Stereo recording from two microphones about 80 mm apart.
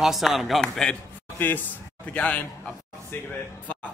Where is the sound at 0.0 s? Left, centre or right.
Centre.